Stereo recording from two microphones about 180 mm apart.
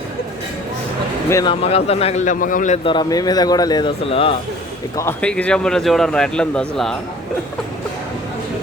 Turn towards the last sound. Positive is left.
turn(degrees=5)  # may be behind; listen again after turning